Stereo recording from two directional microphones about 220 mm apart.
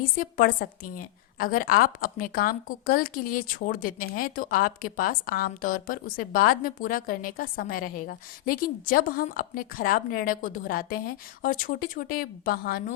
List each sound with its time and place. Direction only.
0.0 s a woman's voice: 40° left (ahead or behind)